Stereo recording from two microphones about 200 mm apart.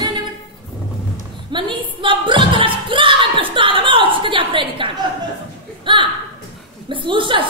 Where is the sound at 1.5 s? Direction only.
25° right (ahead or behind).